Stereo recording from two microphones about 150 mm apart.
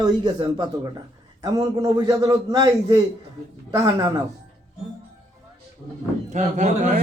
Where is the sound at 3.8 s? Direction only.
25° right (ahead or behind).